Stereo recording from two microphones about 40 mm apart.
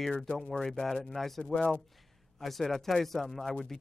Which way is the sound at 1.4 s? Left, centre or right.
Left.